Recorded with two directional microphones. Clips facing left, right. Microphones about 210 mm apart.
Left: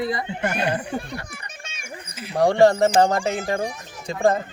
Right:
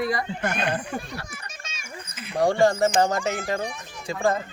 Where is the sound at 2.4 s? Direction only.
65° left (ahead or behind).